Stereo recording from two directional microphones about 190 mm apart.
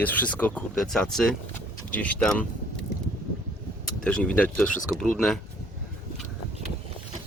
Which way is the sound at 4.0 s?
5° left (ahead or behind).